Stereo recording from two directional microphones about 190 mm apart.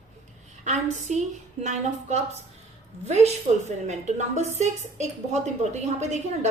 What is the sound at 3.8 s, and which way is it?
A woman's voice, 35° right (ahead or behind).